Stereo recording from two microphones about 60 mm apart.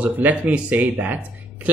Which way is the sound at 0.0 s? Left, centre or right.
Right.